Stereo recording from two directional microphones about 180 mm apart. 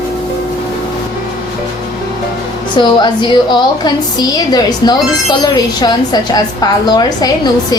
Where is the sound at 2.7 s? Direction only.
25° left (ahead or behind).